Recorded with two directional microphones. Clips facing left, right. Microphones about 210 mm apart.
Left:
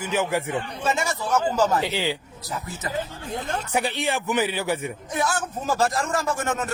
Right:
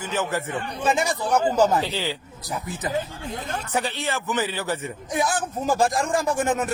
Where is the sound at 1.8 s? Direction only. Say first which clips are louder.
Left 2 dB; 15° left (ahead or behind).